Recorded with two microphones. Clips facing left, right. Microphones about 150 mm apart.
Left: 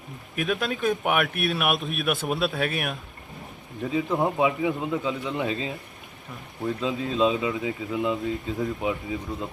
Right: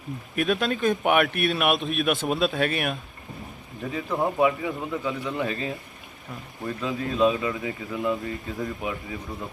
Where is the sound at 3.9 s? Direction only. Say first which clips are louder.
Left 2 dB; 15° left (ahead or behind).